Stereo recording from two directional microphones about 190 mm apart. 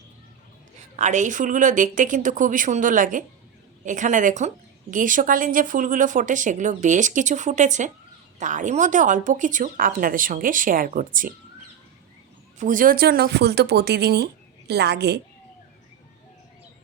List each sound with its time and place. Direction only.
0.9 s a woman's voice: 40° right (ahead or behind)
12.5 s speech: 45° right (ahead or behind); by 15.2 s 60° right (ahead or behind)